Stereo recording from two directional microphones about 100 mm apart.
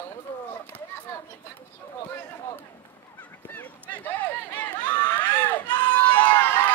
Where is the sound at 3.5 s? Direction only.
15° left (ahead or behind).